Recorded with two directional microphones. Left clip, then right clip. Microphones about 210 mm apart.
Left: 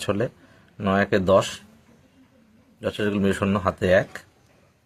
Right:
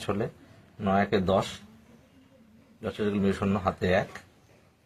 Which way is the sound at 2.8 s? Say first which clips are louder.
Left 5 dB; 50° left (ahead or behind).